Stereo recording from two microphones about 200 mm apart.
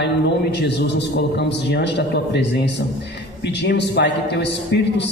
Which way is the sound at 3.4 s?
60° left (ahead or behind).